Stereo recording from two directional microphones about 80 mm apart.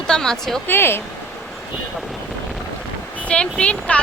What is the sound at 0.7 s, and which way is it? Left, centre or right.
Speech, left.